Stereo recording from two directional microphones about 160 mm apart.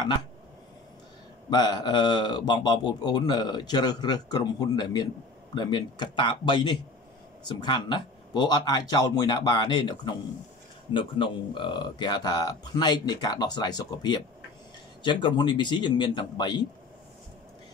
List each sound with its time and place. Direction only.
1.5 s speech: 25° left (ahead or behind)